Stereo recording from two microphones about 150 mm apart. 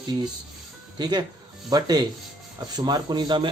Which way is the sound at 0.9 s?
30° right (ahead or behind).